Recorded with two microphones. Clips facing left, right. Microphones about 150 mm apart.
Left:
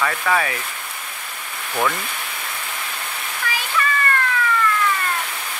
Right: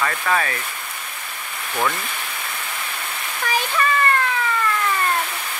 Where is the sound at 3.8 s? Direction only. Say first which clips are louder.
Even; 35° right (ahead or behind).